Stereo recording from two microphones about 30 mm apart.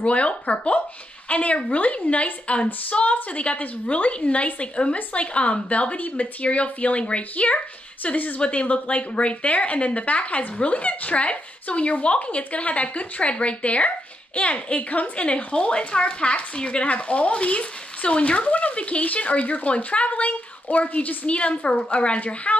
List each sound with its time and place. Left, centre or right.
0.0 s speech: left
5.9 s a woman's voice: left
18.5 s a woman's voice: left
21.3 s a woman's voice: left
22.2 s speech: left